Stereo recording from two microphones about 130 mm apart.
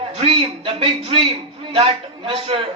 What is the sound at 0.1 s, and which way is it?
A man's voice, 50° right (ahead or behind).